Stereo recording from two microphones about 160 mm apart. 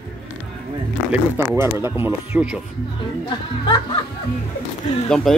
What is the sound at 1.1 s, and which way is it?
Speech, 10° right (ahead or behind).